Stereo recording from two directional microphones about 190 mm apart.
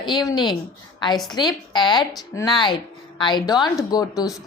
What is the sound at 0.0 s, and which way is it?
A woman's voice, 20° left (ahead or behind).